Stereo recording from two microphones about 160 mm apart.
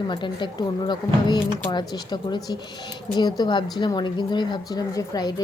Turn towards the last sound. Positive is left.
turn(degrees=25)  # may be behind; listen again after turning